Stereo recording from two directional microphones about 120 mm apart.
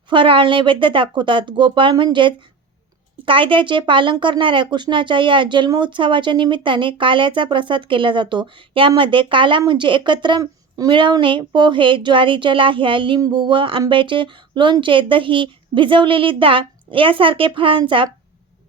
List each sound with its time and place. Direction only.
0.1 s speech: 45° right (ahead or behind)